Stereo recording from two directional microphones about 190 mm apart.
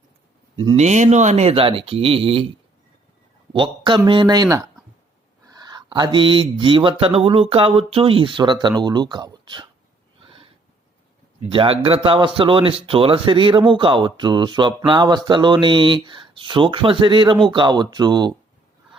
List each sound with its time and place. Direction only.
0.8 s speech: 35° right (ahead or behind)
3.5 s speech: 25° right (ahead or behind)
10.2 s a sound: 30° right (ahead or behind)
11.4 s speech: 30° right (ahead or behind)